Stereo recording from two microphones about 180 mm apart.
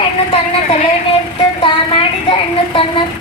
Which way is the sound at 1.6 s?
30° left (ahead or behind).